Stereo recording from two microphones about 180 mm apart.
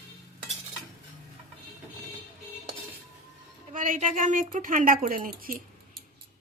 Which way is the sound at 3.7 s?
45° right (ahead or behind).